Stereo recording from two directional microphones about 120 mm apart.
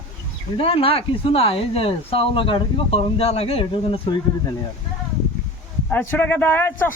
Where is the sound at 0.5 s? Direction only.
50° left (ahead or behind).